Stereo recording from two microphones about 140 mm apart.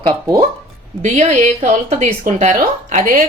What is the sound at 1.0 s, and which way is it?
Speech, 55° right (ahead or behind).